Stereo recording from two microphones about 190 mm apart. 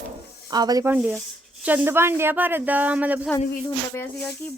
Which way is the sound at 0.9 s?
5° right (ahead or behind).